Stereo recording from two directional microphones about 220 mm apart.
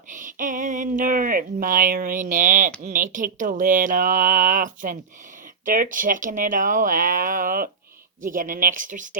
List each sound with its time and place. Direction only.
0.1 s speech: 35° right (ahead or behind)